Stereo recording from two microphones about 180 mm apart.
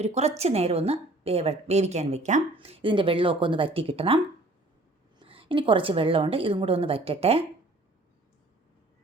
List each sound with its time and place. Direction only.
0.0 s a woman's voice: 35° right (ahead or behind)
5.2 s a woman's voice: 30° right (ahead or behind)